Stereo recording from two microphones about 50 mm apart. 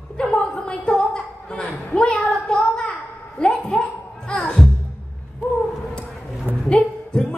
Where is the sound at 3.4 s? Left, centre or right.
Left.